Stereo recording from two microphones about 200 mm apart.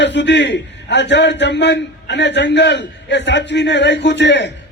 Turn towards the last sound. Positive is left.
turn(degrees=60)  # may be behind; listen again after turning